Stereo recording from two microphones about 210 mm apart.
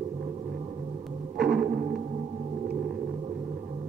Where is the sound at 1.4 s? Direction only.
45° right (ahead or behind).